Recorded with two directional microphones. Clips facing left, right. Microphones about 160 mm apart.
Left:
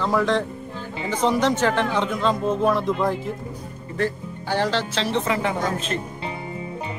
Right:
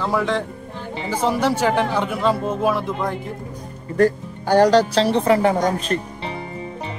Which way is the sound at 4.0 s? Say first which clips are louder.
Right 8 dB; 45° right (ahead or behind).